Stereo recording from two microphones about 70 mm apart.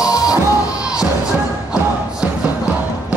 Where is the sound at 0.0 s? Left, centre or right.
Left.